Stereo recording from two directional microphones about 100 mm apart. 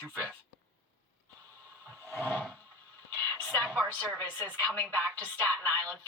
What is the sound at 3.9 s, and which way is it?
Speech, 15° left (ahead or behind).